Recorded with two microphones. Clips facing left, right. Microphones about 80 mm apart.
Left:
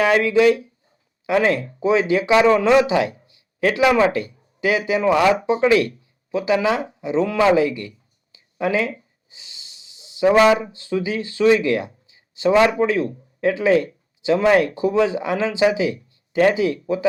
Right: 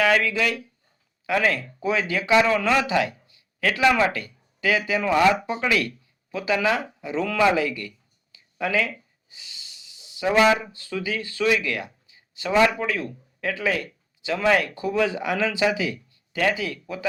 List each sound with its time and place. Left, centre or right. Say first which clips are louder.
0.0 s speech: left 6 dB; left